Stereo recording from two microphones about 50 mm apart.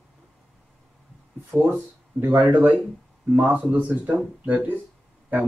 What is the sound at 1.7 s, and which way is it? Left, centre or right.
Speech, right.